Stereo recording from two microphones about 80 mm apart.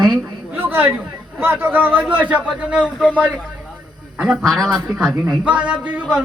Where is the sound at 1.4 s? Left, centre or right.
Right.